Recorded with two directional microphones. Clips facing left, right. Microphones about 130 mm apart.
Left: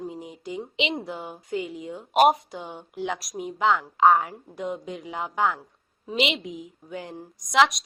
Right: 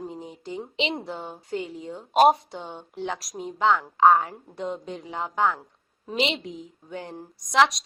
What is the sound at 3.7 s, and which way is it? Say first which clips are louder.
Speech: right 1 dB; 20° right (ahead or behind).